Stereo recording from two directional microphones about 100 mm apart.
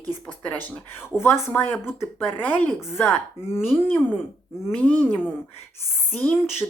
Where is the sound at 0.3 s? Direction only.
15° left (ahead or behind).